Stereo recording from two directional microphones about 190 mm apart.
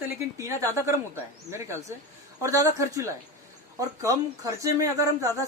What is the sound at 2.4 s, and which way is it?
Speech, 15° right (ahead or behind).